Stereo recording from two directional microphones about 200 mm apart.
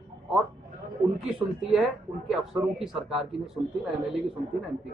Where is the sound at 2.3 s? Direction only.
Centre (ahead or behind).